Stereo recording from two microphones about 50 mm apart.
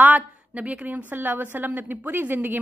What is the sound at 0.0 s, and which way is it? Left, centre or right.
A woman's voice, right.